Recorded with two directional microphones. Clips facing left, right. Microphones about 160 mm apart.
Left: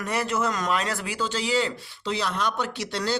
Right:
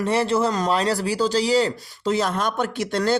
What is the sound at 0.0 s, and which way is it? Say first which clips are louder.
Speech: right 6 dB; 30° right (ahead or behind).